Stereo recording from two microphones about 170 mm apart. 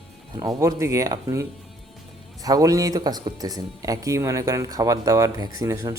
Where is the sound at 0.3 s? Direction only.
20° right (ahead or behind).